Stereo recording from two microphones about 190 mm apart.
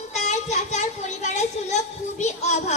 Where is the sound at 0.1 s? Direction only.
35° left (ahead or behind).